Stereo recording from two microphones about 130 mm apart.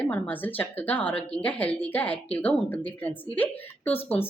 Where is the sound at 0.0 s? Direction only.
15° left (ahead or behind).